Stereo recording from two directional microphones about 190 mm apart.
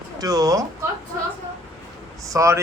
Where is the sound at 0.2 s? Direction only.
20° right (ahead or behind).